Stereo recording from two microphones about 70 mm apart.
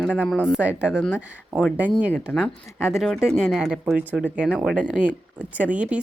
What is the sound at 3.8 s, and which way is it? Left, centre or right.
A woman's voice, right.